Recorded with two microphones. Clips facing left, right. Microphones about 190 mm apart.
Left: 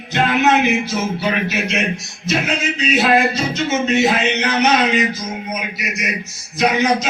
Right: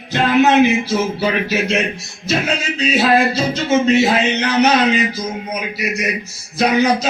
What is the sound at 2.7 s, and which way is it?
A man's voice, 30° right (ahead or behind).